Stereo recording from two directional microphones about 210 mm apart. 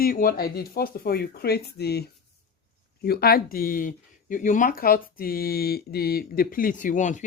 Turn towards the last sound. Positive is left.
turn(degrees=35)  # may be behind; listen again after turning